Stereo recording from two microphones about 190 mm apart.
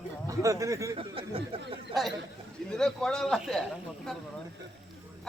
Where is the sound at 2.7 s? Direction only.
5° left (ahead or behind).